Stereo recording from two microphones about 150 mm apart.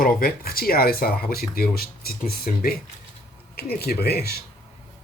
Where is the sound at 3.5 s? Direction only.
90° left.